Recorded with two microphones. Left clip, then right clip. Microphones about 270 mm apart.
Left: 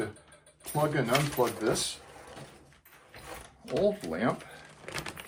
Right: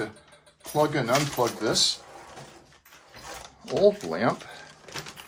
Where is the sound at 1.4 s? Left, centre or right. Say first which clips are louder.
Right 3 dB; right.